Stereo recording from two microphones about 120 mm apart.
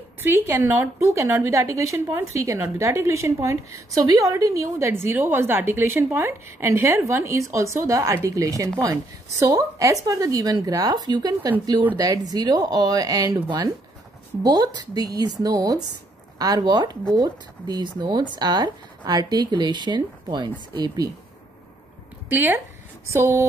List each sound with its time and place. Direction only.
0.2 s a woman's voice: 20° right (ahead or behind)
22.3 s a woman's voice: 15° right (ahead or behind)